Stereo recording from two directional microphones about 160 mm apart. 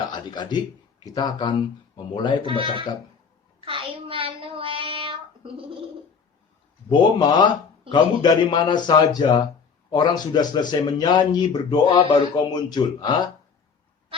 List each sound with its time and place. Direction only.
0.1 s speech: 25° left (ahead or behind)
2.4 s speech: 30° right (ahead or behind)
3.6 s child singing: 35° right (ahead or behind)
7.2 s speech: 30° left (ahead or behind)